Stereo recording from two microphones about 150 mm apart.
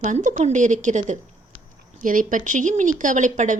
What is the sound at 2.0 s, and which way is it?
A woman's voice, 65° right (ahead or behind).